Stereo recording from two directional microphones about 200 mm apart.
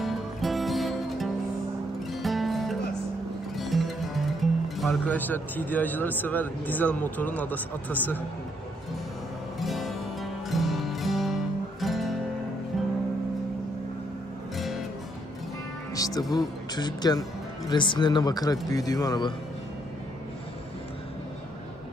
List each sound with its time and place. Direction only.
0.0 s music: centre (ahead or behind)
3.5 s speech: centre (ahead or behind)
9.6 s music: centre (ahead or behind)
15.9 s speech: 15° left (ahead or behind)